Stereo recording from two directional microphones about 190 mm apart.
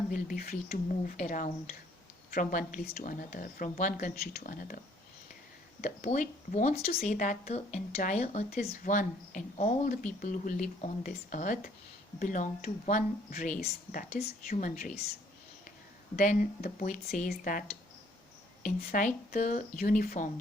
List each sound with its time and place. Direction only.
0.1 s speech: 45° left (ahead or behind)
6.1 s speech: 40° left (ahead or behind)
16.1 s speech: 40° left (ahead or behind)
18.6 s speech: 40° left (ahead or behind)